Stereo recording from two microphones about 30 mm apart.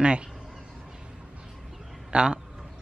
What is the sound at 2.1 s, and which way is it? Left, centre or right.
Speech, right.